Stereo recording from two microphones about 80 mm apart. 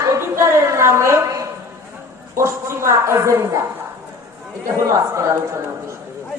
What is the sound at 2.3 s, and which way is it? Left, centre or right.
A woman's voice, right.